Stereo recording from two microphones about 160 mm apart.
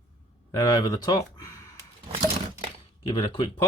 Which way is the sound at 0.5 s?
25° left (ahead or behind).